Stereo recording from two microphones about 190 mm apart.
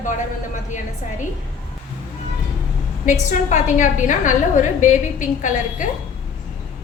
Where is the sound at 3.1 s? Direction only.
40° left (ahead or behind).